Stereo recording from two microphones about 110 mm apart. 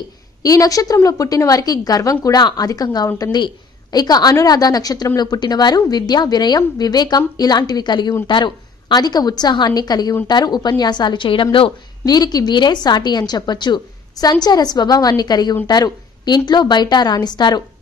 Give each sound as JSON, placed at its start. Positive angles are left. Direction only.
{"t": 0.4, "sound": "a woman's voice", "side_deg": 30}
{"t": 12.0, "sound": "a woman's voice", "side_deg": 35}